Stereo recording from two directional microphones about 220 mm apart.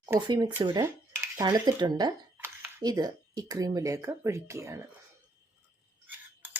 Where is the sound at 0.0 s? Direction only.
20° right (ahead or behind).